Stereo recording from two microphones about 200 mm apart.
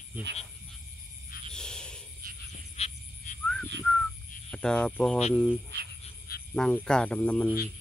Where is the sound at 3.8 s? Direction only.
5° left (ahead or behind).